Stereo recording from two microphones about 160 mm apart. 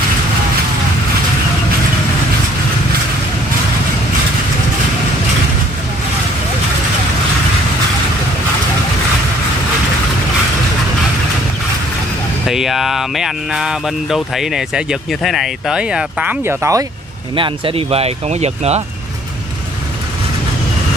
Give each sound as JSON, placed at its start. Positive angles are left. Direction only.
{"t": 12.4, "sound": "speech", "side_deg": 0}
{"t": 17.4, "sound": "speech", "side_deg": -35}